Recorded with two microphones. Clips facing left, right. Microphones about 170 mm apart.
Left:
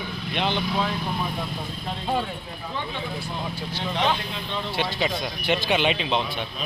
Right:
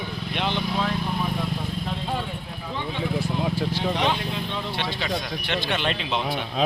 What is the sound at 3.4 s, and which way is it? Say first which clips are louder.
Speech: right 6 dB; 65° right (ahead or behind).